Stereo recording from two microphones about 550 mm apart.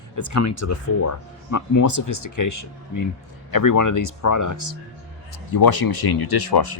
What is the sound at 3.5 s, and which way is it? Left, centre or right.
Speech, left.